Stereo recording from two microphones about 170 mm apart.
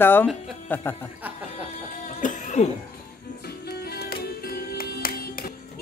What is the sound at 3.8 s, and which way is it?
Music, 70° left (ahead or behind).